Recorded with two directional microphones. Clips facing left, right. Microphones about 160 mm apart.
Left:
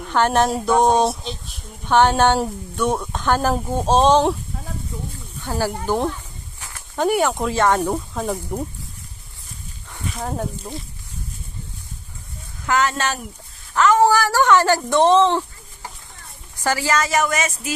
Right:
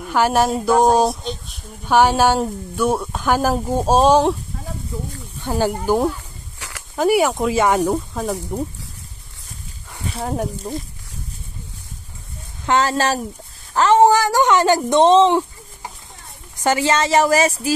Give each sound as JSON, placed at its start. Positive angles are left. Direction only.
{"t": 0.0, "sound": "speech", "side_deg": -5}
{"t": 5.4, "sound": "speech", "side_deg": -15}
{"t": 6.6, "sound": "a sound", "side_deg": -90}
{"t": 7.0, "sound": "speech", "side_deg": -5}
{"t": 10.2, "sound": "speech", "side_deg": -10}
{"t": 12.6, "sound": "a woman's voice", "side_deg": -30}